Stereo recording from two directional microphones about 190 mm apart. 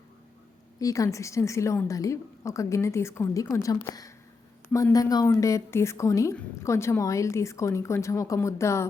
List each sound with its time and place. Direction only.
0.8 s a woman's voice: 15° left (ahead or behind)